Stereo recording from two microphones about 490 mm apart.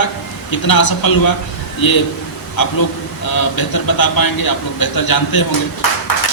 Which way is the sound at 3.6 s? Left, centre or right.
Left.